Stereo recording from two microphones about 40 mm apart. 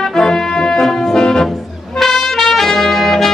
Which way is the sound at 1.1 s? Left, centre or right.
Centre.